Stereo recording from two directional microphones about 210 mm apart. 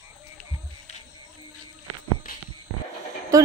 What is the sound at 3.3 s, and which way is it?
Speech, 15° right (ahead or behind).